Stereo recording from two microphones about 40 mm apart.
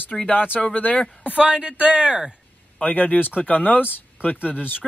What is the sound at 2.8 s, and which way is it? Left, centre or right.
Speech, left.